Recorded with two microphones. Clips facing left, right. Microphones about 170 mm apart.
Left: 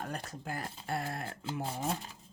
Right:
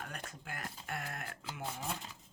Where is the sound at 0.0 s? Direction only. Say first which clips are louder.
Left 6 dB; 35° left (ahead or behind).